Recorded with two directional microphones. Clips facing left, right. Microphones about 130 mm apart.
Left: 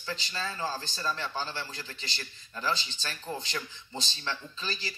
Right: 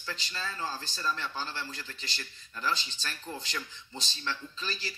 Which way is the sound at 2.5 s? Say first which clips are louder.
Left 1 dB; 25° left (ahead or behind).